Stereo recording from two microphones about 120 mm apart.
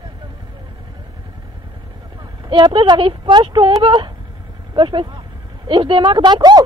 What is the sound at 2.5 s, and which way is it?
Speech, 45° right (ahead or behind).